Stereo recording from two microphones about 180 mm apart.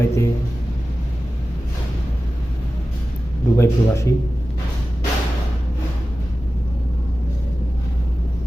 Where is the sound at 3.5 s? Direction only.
15° left (ahead or behind).